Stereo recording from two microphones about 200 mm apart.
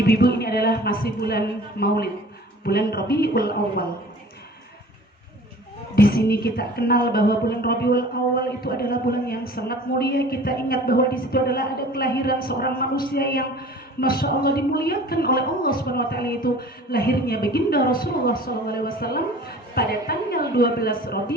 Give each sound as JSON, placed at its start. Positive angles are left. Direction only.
{"t": 0.0, "sound": "speech", "side_deg": 50}
{"t": 6.0, "sound": "speech", "side_deg": 50}